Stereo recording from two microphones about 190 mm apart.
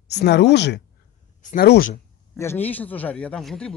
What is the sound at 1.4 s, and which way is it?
Speech, 40° left (ahead or behind).